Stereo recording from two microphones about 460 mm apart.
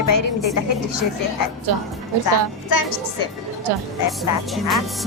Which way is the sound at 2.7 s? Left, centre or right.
Left.